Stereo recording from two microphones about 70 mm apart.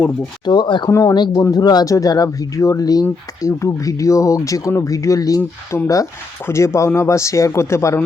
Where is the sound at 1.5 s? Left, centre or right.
Left.